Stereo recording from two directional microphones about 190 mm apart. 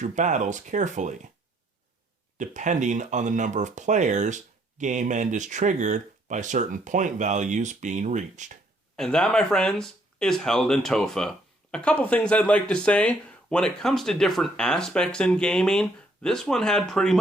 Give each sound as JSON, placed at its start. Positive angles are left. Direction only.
{"t": 0.0, "sound": "speech", "side_deg": -40}
{"t": 2.4, "sound": "speech", "side_deg": -40}
{"t": 9.0, "sound": "speech", "side_deg": 5}